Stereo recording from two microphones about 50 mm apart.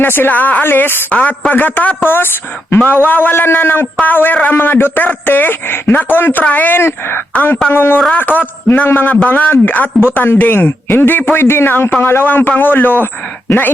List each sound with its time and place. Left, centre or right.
0.3 s a man's voice: left
0.6 s speech: left
1.1 s a man's voice: left
2.0 s a man's voice: left